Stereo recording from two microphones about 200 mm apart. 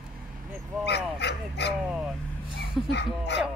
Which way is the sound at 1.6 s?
55° left (ahead or behind).